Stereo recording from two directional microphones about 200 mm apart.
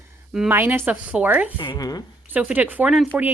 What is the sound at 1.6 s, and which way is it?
Speech, 20° left (ahead or behind).